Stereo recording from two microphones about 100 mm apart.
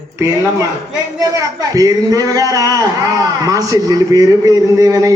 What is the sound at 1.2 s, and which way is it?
A man's voice, 35° right (ahead or behind).